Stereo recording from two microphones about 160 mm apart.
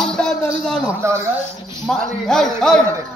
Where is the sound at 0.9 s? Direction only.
15° right (ahead or behind).